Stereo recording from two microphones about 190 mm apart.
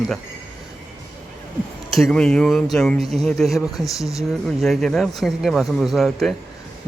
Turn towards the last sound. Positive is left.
turn(degrees=0)  # may be behind; listen again after turning